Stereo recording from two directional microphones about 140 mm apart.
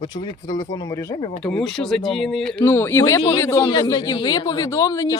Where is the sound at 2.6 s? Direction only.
15° left (ahead or behind).